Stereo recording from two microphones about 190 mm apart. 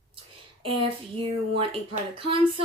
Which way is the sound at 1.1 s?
30° right (ahead or behind).